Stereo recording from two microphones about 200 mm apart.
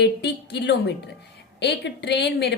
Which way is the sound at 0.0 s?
60° left (ahead or behind).